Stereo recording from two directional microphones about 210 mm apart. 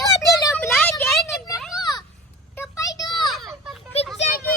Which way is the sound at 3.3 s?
Centre (ahead or behind).